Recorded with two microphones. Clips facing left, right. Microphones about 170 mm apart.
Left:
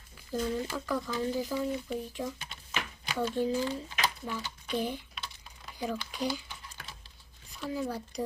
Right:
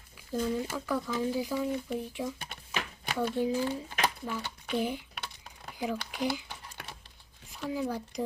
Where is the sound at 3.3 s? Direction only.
10° right (ahead or behind).